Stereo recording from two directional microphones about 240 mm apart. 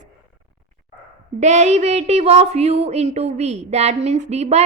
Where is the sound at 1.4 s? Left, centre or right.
Right.